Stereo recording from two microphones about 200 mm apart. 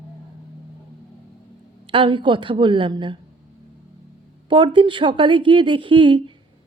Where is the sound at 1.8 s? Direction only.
25° right (ahead or behind).